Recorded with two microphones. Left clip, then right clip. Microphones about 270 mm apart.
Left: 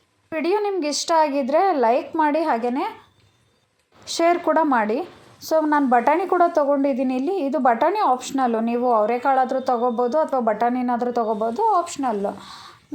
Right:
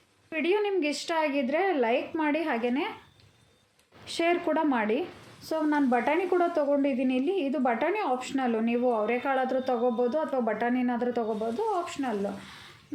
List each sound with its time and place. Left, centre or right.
0.4 s a woman's voice: centre
4.0 s a woman's voice: centre